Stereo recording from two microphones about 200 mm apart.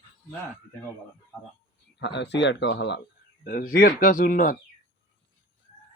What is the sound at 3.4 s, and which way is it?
Speech, 45° left (ahead or behind).